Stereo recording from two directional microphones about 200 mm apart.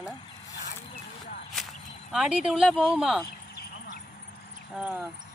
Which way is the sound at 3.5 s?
50° left (ahead or behind).